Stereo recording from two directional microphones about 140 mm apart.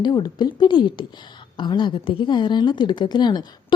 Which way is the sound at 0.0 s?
30° left (ahead or behind).